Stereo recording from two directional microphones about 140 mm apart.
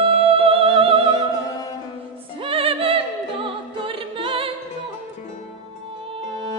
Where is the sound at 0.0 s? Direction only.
40° right (ahead or behind).